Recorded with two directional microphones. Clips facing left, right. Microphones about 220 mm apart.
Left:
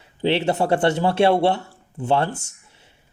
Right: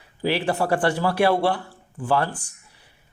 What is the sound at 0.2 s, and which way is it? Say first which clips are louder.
Speech: left 3 dB; 25° left (ahead or behind).